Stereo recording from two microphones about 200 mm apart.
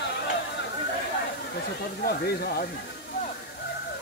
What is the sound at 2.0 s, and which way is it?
Speech, 50° left (ahead or behind).